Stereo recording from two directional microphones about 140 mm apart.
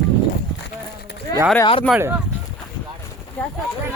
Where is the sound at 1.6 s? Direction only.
40° left (ahead or behind).